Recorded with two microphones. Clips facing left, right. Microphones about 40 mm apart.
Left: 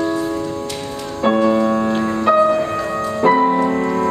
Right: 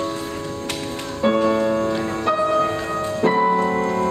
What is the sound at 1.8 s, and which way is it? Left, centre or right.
Music, centre.